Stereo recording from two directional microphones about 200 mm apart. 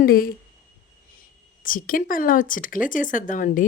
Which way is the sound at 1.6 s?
45° left (ahead or behind).